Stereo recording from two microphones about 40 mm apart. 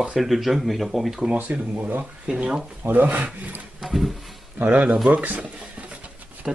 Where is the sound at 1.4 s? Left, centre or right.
Right.